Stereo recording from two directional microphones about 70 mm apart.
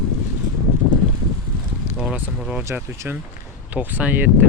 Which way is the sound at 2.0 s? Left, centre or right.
Centre.